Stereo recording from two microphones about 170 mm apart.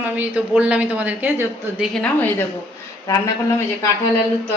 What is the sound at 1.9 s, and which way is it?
Speech, 5° left (ahead or behind).